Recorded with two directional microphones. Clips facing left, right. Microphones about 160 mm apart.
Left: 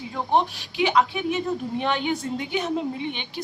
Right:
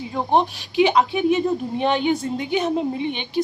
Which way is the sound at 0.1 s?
20° right (ahead or behind).